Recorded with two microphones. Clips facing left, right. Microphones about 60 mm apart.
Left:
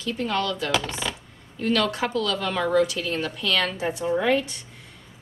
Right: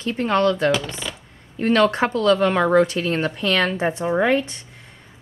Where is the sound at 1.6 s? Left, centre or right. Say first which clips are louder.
Right 6 dB; right.